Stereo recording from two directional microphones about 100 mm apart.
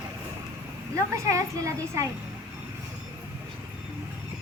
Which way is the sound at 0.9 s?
30° right (ahead or behind).